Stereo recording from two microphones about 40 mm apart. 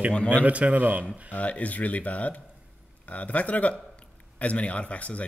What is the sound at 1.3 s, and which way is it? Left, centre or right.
Speech, left.